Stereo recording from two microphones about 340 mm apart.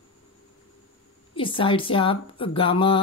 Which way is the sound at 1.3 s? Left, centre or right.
Centre.